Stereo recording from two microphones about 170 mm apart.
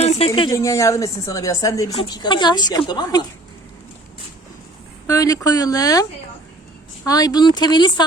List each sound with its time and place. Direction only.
0.0 s a sound: 35° left (ahead or behind)
0.5 s a woman's voice: 20° left (ahead or behind)
5.0 s a woman's voice: 20° left (ahead or behind)